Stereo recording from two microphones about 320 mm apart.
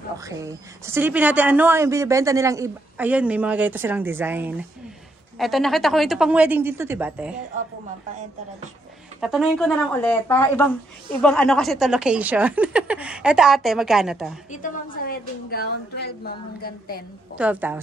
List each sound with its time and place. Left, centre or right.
0.2 s speech: centre
9.2 s speech: centre
14.5 s a woman's voice: left
17.4 s speech: centre